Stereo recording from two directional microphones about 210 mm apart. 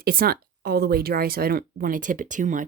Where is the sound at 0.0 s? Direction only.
45° right (ahead or behind).